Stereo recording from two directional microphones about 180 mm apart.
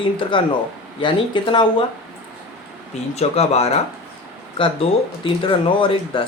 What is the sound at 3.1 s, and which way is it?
A woman's voice, 35° left (ahead or behind).